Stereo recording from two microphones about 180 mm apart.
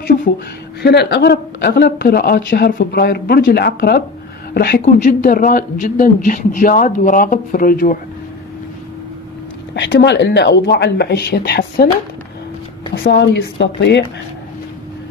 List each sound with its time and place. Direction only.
0.8 s speech: 65° left (ahead or behind)
4.8 s a man's voice: 45° left (ahead or behind)
9.8 s speech: 75° left (ahead or behind)
13.0 s speech: 75° left (ahead or behind)